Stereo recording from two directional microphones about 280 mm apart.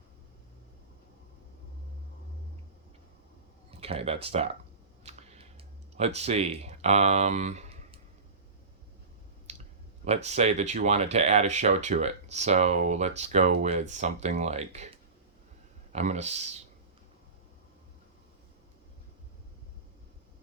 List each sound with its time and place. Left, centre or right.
3.7 s speech: right
5.0 s clicking: right
6.1 s speech: right
9.5 s clicking: right
10.2 s speech: right